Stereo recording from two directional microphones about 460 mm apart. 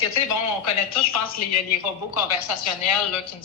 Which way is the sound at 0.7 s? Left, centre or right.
Left.